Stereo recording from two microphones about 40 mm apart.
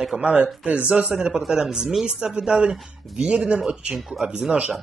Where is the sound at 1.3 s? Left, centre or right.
Centre; by 3.6 s right.